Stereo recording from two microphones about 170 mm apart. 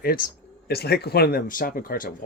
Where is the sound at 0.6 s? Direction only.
70° left (ahead or behind); by 2.3 s 55° left (ahead or behind).